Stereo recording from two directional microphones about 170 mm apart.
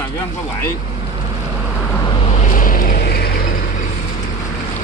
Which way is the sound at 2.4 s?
50° left (ahead or behind).